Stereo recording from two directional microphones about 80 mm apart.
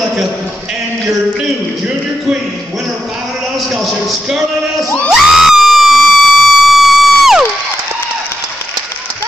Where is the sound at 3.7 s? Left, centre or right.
Centre.